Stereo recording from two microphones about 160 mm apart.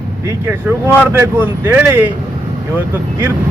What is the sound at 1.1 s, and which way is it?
Speech, 15° right (ahead or behind).